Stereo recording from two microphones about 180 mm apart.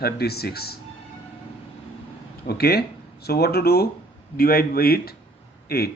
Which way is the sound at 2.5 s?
60° left (ahead or behind).